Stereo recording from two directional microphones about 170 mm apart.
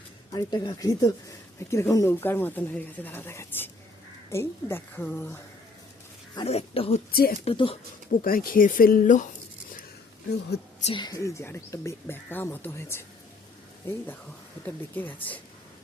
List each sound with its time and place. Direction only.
0.3 s speech: 25° left (ahead or behind)
6.3 s speech: 35° left (ahead or behind)
7.1 s speech: 60° left (ahead or behind)
7.4 s speech: 35° left (ahead or behind)
8.2 s speech: 60° left (ahead or behind)
10.5 s speech: 75° left (ahead or behind)
10.8 s speech: 25° left (ahead or behind); by 15.4 s 10° left (ahead or behind)